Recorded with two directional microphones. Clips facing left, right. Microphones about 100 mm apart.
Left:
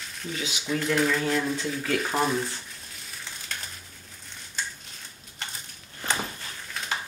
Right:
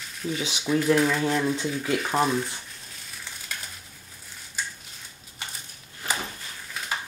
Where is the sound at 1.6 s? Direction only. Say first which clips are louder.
Right 1 dB; 15° right (ahead or behind).